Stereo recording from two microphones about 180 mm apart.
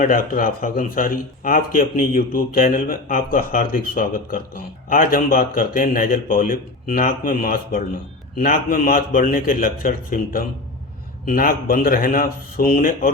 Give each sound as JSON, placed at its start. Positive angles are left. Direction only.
{"t": 0.0, "sound": "speech", "side_deg": 50}